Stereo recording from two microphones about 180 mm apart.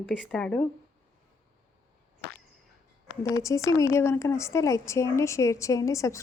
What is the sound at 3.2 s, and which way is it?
Speech, 20° left (ahead or behind).